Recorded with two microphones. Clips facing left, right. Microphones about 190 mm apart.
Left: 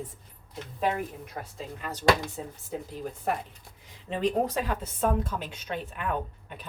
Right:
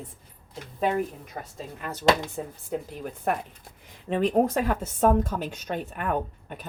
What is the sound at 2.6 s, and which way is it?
A woman's voice, 55° right (ahead or behind).